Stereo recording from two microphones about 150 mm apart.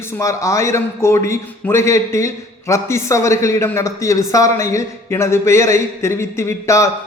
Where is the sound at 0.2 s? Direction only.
20° left (ahead or behind).